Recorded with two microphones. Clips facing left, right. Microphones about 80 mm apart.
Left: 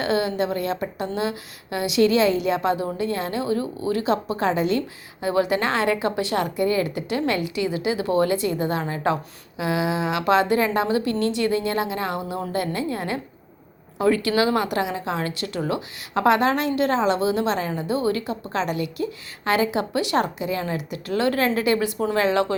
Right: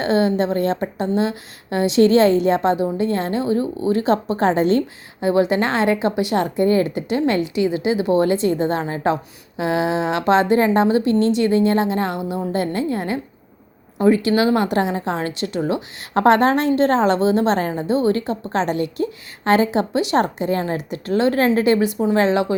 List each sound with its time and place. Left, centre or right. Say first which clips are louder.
0.0 s a woman's voice: right 5 dB; right
5.2 s a woman's voice: right 4 dB; right
16.0 s a woman's voice: right 5 dB; right
20.2 s a woman's voice: right 5 dB; right